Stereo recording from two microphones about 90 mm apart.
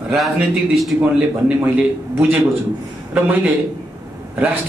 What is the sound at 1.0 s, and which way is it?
Speech, 20° right (ahead or behind).